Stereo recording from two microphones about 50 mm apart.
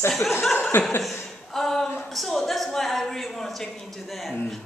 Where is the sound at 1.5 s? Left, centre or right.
Centre.